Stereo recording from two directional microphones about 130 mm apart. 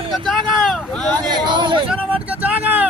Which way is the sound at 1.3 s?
35° right (ahead or behind).